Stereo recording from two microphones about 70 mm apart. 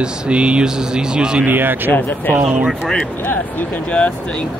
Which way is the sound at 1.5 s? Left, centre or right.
Right.